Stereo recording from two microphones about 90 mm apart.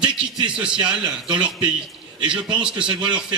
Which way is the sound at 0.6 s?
10° right (ahead or behind).